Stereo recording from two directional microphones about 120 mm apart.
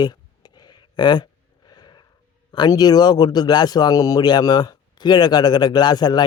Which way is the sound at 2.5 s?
35° left (ahead or behind).